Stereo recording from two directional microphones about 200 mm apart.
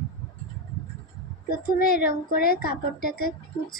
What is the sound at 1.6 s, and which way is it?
A woman's voice, 50° left (ahead or behind).